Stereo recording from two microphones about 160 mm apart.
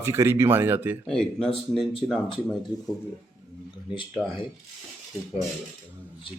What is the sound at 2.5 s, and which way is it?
Speech, centre (ahead or behind).